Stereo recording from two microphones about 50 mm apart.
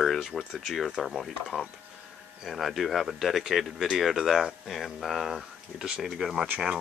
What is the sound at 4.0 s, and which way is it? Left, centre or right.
Speech, centre.